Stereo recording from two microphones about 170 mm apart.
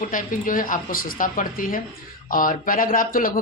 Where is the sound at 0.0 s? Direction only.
50° left (ahead or behind).